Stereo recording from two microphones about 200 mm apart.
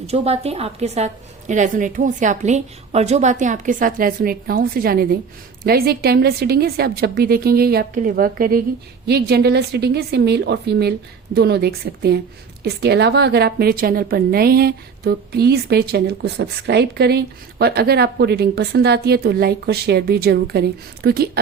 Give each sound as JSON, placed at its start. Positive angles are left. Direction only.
{"t": 0.1, "sound": "a woman's voice", "side_deg": -30}